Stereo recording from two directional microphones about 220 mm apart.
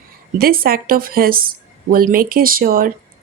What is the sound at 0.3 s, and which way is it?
Speech, 40° right (ahead or behind).